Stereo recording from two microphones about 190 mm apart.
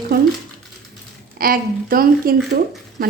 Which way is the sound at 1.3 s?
50° right (ahead or behind).